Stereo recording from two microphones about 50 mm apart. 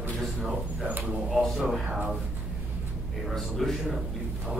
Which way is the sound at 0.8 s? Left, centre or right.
Right.